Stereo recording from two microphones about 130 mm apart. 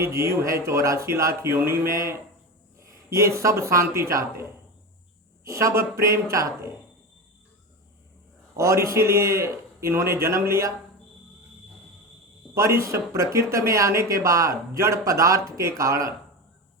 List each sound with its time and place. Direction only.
0.0 s speech: 25° right (ahead or behind)
5.5 s speech: 25° right (ahead or behind)
8.5 s speech: 25° right (ahead or behind)
12.5 s speech: 25° right (ahead or behind)